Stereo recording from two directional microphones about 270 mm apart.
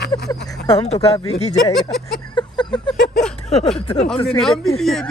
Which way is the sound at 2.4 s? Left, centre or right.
Centre.